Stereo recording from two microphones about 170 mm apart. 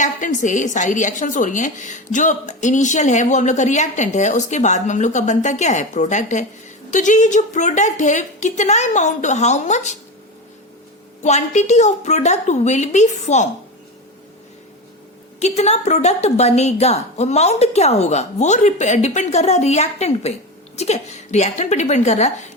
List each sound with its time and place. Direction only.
0.0 s a woman's voice: 45° left (ahead or behind)
11.2 s a woman's voice: 45° left (ahead or behind)
15.4 s a woman's voice: 40° left (ahead or behind)